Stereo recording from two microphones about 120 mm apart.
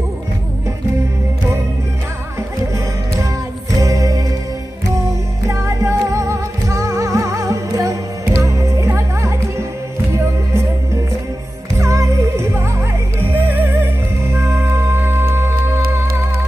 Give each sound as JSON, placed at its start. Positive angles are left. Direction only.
{"t": 3.7, "sound": "music", "side_deg": -25}
{"t": 5.5, "sound": "music", "side_deg": -25}
{"t": 11.8, "sound": "music", "side_deg": -25}